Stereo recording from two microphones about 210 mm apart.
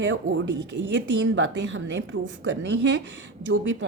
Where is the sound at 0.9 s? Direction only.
60° right (ahead or behind).